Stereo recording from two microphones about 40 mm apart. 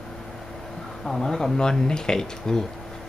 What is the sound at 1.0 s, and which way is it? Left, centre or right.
Speech, centre.